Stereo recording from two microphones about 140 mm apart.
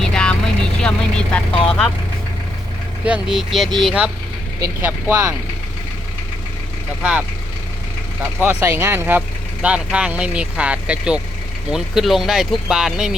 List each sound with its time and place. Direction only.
0.0 s vehicle: 5° left (ahead or behind)
3.1 s speech: 5° right (ahead or behind)
4.8 s speech: 15° right (ahead or behind)
7.0 s speech: 10° right (ahead or behind)